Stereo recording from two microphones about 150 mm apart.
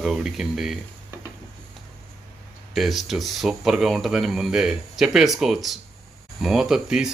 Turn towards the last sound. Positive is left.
turn(degrees=-5)  # may be behind; listen again after turning